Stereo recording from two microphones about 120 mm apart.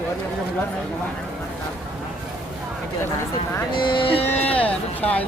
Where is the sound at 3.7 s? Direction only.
40° left (ahead or behind).